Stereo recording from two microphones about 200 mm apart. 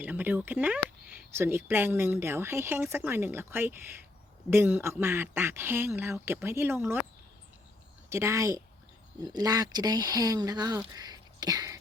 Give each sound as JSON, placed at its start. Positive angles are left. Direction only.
{"t": 0.0, "sound": "speech", "side_deg": -10}
{"t": 8.1, "sound": "speech", "side_deg": -15}